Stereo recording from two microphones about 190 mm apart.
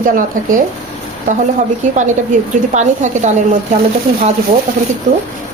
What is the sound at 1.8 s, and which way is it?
A woman's voice, 40° right (ahead or behind).